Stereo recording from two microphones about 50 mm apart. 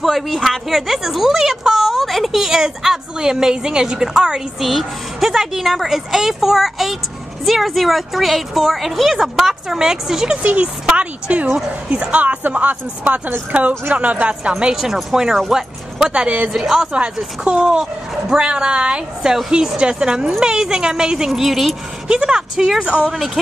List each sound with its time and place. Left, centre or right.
0.0 s a woman's voice: centre
4.6 s a woman's voice: centre
10.4 s speech: right
11.4 s a woman's voice: centre
11.9 s speech: right
14.8 s a woman's voice: centre
16.9 s a woman's voice: centre
21.3 s a woman's voice: centre
22.0 s a woman's voice: centre